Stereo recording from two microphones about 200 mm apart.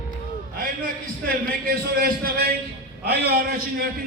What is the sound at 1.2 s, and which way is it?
A man's voice, 45° right (ahead or behind).